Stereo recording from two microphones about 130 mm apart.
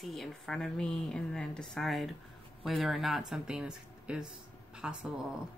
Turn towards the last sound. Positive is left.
turn(degrees=-5)  # may be behind; listen again after turning